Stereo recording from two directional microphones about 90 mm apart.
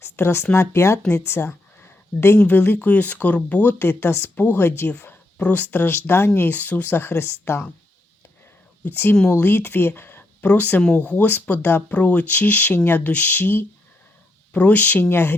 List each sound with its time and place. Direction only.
0.0 s speech: 30° left (ahead or behind)
8.8 s speech: 25° left (ahead or behind)